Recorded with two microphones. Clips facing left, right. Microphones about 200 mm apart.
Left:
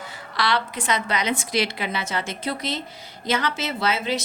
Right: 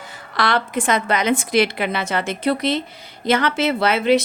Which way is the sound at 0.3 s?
50° right (ahead or behind).